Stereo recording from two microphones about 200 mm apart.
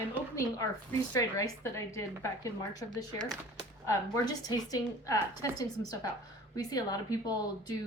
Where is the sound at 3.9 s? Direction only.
15° left (ahead or behind).